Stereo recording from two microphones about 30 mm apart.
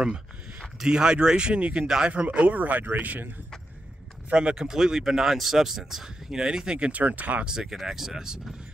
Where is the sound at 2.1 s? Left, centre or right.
Right.